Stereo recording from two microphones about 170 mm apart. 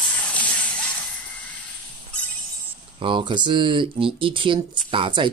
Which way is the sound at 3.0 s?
30° right (ahead or behind).